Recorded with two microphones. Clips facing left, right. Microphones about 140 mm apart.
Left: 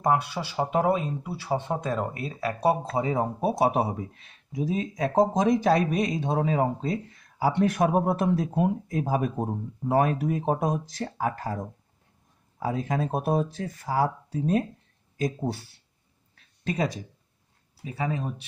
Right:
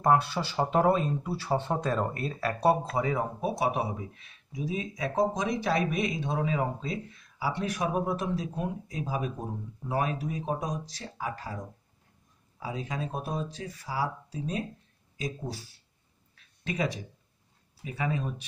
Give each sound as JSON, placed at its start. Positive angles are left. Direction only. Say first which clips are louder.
{"t": 0.0, "sound": "speech", "louder": "even", "side_deg": 15}
{"t": 2.8, "sound": "speech", "louder": "left 3 dB", "side_deg": 30}
{"t": 16.3, "sound": "a sound", "louder": "left 4 dB", "side_deg": 40}
{"t": 17.8, "sound": "speech", "louder": "left 2 dB", "side_deg": 35}